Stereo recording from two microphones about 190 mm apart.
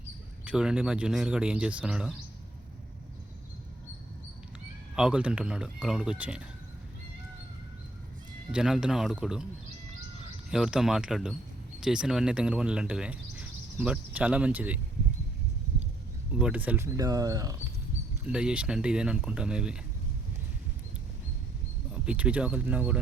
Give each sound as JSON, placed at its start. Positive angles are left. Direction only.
{"t": 0.4, "sound": "speech", "side_deg": -5}
{"t": 4.9, "sound": "speech", "side_deg": -5}
{"t": 8.5, "sound": "speech", "side_deg": -5}
{"t": 10.5, "sound": "speech", "side_deg": -5}
{"t": 16.4, "sound": "speech", "side_deg": -5}
{"t": 18.3, "sound": "speech", "side_deg": -5}
{"t": 22.0, "sound": "speech", "side_deg": -5}